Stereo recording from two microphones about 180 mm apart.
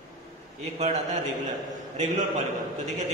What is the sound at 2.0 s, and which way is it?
Speech, 40° right (ahead or behind).